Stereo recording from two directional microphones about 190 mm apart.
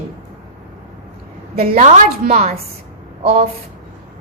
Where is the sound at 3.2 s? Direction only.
35° right (ahead or behind).